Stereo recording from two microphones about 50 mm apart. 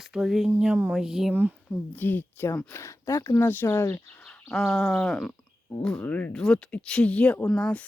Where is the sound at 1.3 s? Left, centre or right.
Right.